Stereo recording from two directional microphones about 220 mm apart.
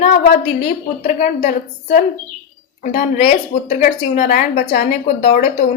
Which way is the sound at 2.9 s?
40° left (ahead or behind).